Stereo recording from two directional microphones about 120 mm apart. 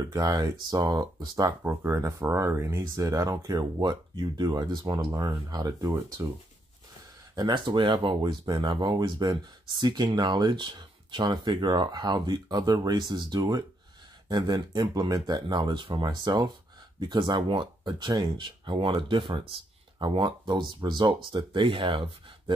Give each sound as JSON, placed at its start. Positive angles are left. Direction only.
{"t": 0.0, "sound": "speech", "side_deg": -30}
{"t": 1.6, "sound": "speech", "side_deg": -20}
{"t": 7.3, "sound": "speech", "side_deg": -40}